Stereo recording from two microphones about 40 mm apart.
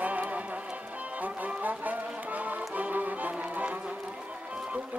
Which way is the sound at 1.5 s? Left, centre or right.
Right.